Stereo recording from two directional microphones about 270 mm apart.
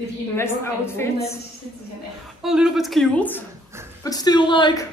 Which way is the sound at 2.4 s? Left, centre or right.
Centre.